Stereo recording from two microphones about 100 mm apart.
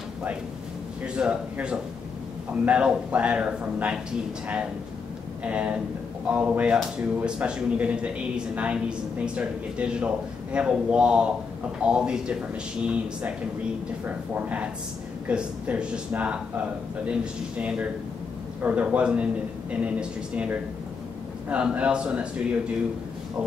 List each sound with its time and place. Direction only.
1.0 s speech: 10° right (ahead or behind)
5.4 s speech: 15° right (ahead or behind)